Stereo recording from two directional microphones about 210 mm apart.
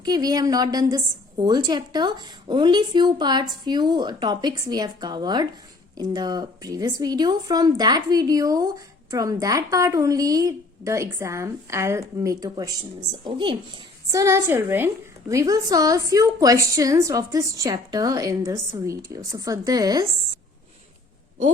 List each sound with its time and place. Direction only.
0.0 s a woman's voice: 20° right (ahead or behind)